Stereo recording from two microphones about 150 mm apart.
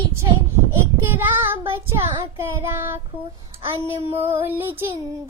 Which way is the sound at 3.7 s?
15° right (ahead or behind).